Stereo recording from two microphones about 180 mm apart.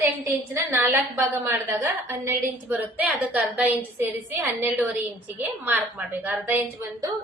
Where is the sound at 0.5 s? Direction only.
10° right (ahead or behind).